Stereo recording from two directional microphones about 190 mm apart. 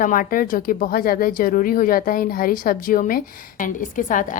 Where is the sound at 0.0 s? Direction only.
45° left (ahead or behind).